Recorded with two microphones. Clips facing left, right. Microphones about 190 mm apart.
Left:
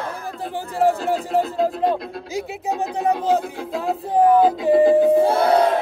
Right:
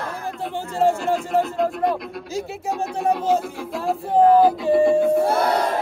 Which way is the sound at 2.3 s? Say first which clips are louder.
Left 1 dB; 15° left (ahead or behind).